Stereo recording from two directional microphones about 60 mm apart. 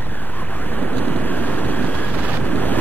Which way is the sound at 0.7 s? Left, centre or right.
Left.